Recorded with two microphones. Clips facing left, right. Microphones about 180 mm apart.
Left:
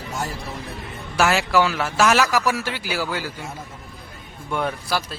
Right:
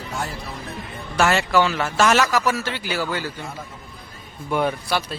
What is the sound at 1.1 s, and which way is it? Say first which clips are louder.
A man's voice: even; 5° left (ahead or behind).